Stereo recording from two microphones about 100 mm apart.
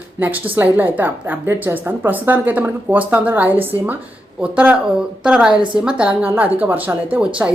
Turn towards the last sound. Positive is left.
turn(degrees=-15)  # may be behind; listen again after turning